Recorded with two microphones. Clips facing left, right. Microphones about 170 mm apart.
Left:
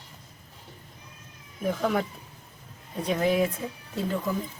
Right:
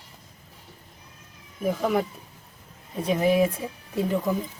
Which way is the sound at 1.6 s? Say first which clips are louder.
Right 2 dB; 5° right (ahead or behind).